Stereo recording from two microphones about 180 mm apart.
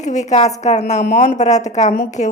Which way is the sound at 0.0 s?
40° left (ahead or behind).